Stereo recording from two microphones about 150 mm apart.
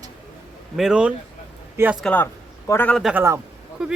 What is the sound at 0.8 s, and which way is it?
A man's voice, 5° right (ahead or behind).